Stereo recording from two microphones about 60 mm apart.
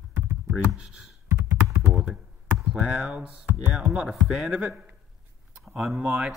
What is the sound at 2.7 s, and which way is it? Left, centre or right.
Speech, centre.